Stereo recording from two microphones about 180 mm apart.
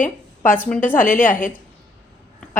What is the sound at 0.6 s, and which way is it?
Speech, 5° left (ahead or behind).